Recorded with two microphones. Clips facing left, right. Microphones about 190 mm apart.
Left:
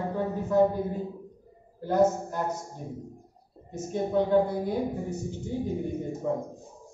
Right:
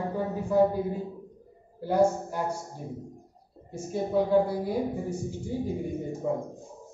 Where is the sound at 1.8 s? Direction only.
10° right (ahead or behind).